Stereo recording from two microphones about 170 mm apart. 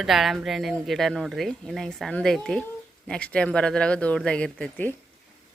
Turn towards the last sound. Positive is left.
turn(degrees=10)  # may be behind; listen again after turning